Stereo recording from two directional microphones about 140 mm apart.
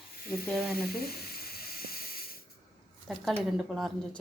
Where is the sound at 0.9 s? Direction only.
90° left.